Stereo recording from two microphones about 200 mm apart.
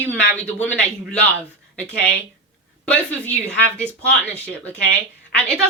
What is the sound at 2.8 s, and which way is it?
Speech, 5° left (ahead or behind).